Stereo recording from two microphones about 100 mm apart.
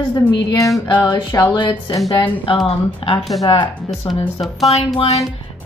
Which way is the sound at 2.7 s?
70° left (ahead or behind).